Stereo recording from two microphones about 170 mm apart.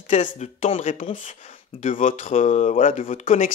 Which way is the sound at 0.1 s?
45° left (ahead or behind).